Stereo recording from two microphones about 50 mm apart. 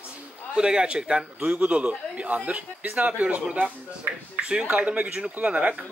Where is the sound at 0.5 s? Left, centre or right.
Centre.